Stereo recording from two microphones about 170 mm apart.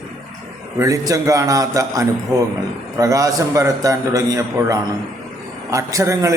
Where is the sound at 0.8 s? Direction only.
20° right (ahead or behind).